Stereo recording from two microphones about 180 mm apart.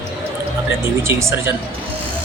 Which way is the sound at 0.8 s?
15° right (ahead or behind).